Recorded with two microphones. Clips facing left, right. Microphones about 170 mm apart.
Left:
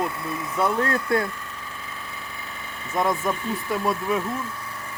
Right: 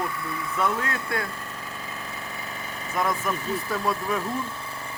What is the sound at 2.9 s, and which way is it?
Speech, 20° left (ahead or behind).